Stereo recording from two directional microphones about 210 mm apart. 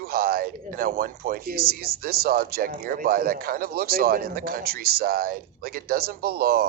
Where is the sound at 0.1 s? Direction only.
45° right (ahead or behind).